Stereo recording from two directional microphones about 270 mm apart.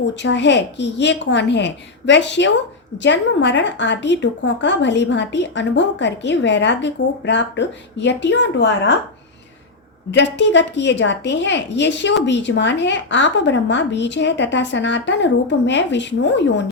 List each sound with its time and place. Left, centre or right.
0.0 s a woman's voice: left
10.1 s a woman's voice: left